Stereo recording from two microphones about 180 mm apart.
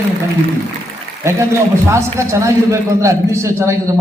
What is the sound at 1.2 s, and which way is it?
A man's voice, 15° right (ahead or behind).